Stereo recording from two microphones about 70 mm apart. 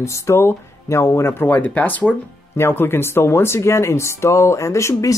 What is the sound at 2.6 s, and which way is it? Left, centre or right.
Speech, left.